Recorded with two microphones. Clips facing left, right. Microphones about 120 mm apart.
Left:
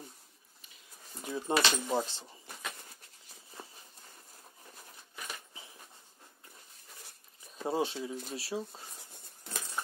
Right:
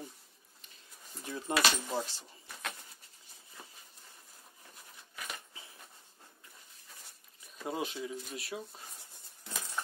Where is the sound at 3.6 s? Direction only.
30° left (ahead or behind).